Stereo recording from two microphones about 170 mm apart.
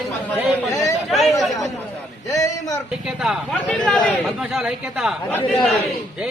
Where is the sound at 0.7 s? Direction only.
20° left (ahead or behind).